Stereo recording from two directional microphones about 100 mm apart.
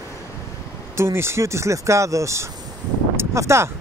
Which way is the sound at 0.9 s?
25° right (ahead or behind).